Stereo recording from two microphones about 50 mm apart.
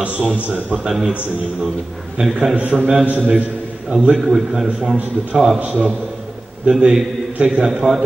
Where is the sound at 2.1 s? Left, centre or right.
Centre.